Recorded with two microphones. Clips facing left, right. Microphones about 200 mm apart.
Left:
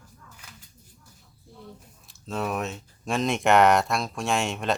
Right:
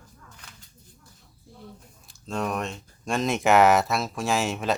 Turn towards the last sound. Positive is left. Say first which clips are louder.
# right 1 dB
turn(degrees=0)  # may be behind; listen again after turning